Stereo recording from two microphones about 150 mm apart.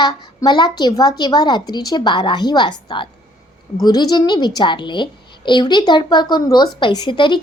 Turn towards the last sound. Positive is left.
turn(degrees=35)  # may be behind; listen again after turning